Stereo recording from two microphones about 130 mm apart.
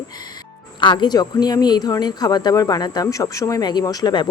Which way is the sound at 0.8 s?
35° left (ahead or behind).